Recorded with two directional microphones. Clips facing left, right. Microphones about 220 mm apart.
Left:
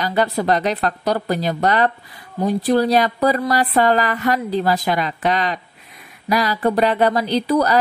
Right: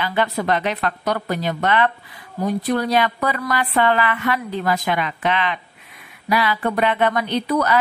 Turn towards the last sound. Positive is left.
turn(degrees=35)  # may be behind; listen again after turning